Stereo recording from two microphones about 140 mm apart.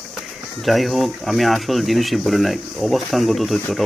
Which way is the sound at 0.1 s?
Centre (ahead or behind).